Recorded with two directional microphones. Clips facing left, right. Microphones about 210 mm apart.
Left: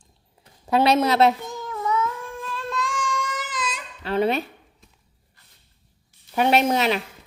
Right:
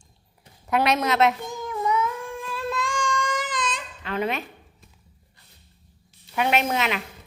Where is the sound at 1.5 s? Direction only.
15° right (ahead or behind); by 3.8 s 5° left (ahead or behind).